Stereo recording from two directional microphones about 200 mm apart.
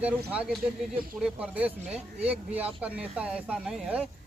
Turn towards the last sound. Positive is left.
turn(degrees=-5)  # may be behind; listen again after turning